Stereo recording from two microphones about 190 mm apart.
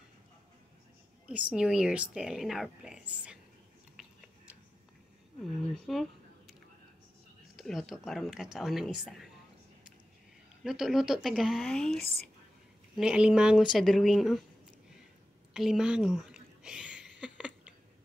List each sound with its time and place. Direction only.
1.2 s speech: 5° right (ahead or behind)
5.9 s a sound: centre (ahead or behind)
7.5 s speech: centre (ahead or behind)
10.6 s speech: centre (ahead or behind)
12.0 s speech: 55° left (ahead or behind)
12.9 s speech: 5° right (ahead or behind)
15.5 s a sound: centre (ahead or behind)